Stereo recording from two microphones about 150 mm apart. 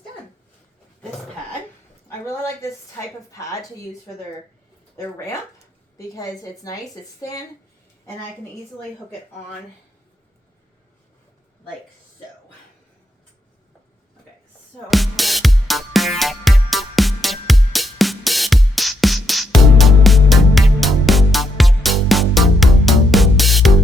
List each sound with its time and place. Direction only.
2.0 s a sound: 20° left (ahead or behind)
3.3 s speech: 20° left (ahead or behind)
4.9 s speech: 20° left (ahead or behind)
14.8 s music: centre (ahead or behind)